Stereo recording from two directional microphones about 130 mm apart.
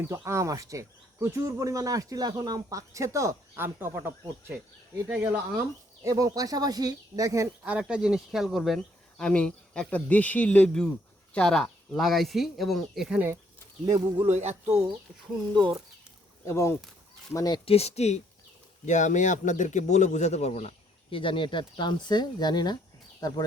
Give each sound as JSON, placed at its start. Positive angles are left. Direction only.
{"t": 0.3, "sound": "speech", "side_deg": -25}
{"t": 6.0, "sound": "speech", "side_deg": -25}
{"t": 7.6, "sound": "speech", "side_deg": -10}
{"t": 13.8, "sound": "speech", "side_deg": -50}
{"t": 16.5, "sound": "speech", "side_deg": 25}
{"t": 17.7, "sound": "speech", "side_deg": 55}
{"t": 18.9, "sound": "a man's voice", "side_deg": 70}
{"t": 21.1, "sound": "speech", "side_deg": 40}